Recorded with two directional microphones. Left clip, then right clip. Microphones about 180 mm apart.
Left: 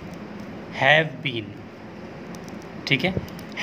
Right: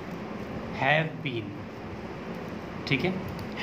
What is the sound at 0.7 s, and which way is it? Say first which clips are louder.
Speech: left 7 dB; 45° left (ahead or behind).